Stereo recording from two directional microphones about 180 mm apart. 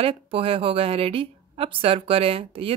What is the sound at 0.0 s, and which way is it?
Speech, 30° right (ahead or behind).